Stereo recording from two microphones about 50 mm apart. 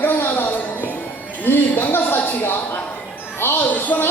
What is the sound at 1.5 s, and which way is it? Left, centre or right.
Speech, left.